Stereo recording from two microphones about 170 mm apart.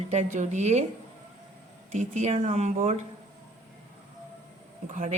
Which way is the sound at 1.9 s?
45° right (ahead or behind).